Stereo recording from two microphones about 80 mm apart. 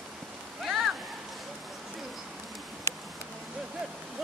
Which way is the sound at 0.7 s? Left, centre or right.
Centre.